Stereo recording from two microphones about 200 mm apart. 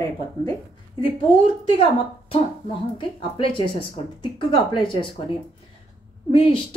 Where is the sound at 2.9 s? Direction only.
25° left (ahead or behind).